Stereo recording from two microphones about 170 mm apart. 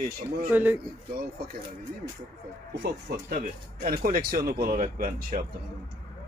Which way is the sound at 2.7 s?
70° right (ahead or behind).